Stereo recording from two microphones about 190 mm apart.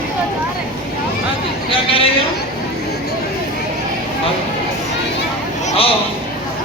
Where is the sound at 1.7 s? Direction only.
30° left (ahead or behind).